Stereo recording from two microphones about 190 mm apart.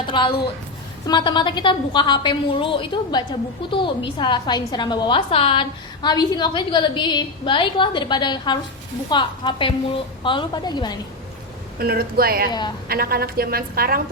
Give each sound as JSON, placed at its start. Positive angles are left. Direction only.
{"t": 0.0, "sound": "a woman's voice", "side_deg": 25}
{"t": 11.8, "sound": "a woman's voice", "side_deg": -55}
{"t": 12.5, "sound": "a woman's voice", "side_deg": 20}
{"t": 12.9, "sound": "a woman's voice", "side_deg": -50}